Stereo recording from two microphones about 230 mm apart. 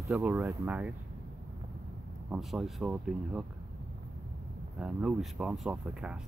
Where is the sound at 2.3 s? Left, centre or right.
Centre.